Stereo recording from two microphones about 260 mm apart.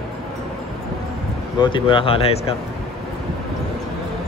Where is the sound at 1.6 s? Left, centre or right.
Centre.